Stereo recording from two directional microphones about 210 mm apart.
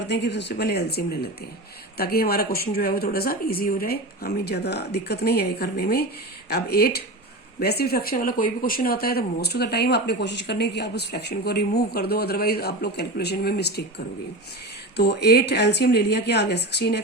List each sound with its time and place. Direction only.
0.1 s speech: 55° left (ahead or behind)
14.9 s speech: 50° left (ahead or behind)